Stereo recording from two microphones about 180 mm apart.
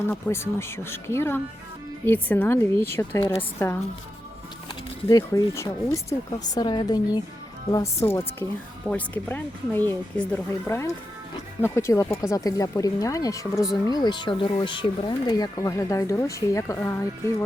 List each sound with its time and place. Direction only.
0.1 s speech: 15° left (ahead or behind)
5.0 s speech: 15° left (ahead or behind)